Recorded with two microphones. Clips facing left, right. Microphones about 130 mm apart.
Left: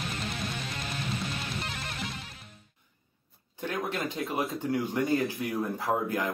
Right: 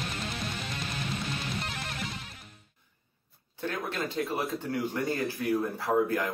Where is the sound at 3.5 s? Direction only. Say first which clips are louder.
Left 1 dB; 15° left (ahead or behind).